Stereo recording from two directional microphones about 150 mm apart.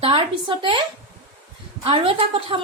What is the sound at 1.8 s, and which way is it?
Speech, 40° right (ahead or behind).